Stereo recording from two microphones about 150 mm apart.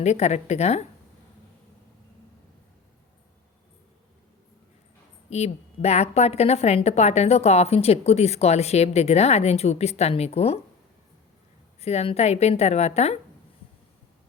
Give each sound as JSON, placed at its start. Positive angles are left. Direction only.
{"t": 0.0, "sound": "a woman's voice", "side_deg": 50}
{"t": 5.3, "sound": "a woman's voice", "side_deg": 45}
{"t": 11.8, "sound": "a woman's voice", "side_deg": 45}